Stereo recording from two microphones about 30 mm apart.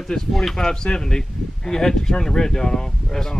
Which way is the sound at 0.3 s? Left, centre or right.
Centre.